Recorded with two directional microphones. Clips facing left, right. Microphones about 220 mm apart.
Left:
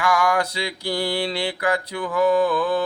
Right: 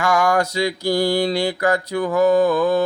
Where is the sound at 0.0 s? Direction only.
45° right (ahead or behind).